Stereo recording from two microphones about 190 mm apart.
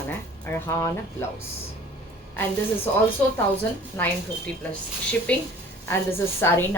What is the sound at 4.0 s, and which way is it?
Speech, 10° left (ahead or behind).